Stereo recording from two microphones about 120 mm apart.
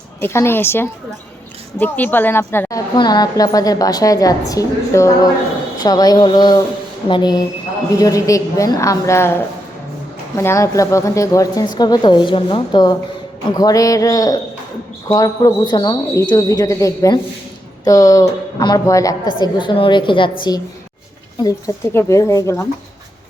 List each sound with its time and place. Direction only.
0.2 s a woman's voice: 20° left (ahead or behind)
2.6 s a woman's voice: 35° left (ahead or behind)
21.9 s a woman's voice: 25° left (ahead or behind)